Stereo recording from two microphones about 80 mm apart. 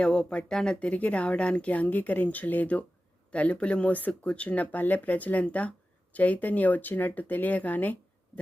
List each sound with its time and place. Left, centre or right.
0.0 s speech: centre